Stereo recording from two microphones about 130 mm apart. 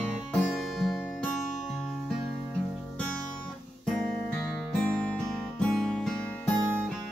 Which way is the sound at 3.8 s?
5° left (ahead or behind).